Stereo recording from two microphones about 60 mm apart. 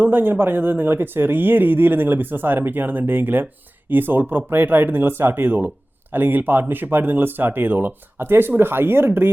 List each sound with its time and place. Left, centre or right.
0.0 s speech: right